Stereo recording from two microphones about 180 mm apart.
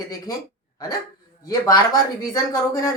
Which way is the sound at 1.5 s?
20° left (ahead or behind).